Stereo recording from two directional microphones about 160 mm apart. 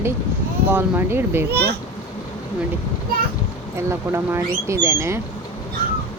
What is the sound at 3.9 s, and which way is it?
Speech, 15° right (ahead or behind).